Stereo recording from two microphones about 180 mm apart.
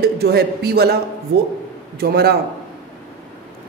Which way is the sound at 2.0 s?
60° right (ahead or behind).